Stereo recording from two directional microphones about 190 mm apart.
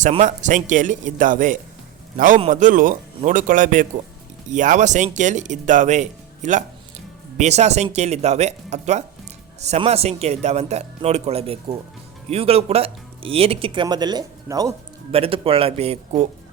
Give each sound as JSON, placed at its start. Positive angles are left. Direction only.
{"t": 0.0, "sound": "a man's voice", "side_deg": -40}
{"t": 15.1, "sound": "a man's voice", "side_deg": -30}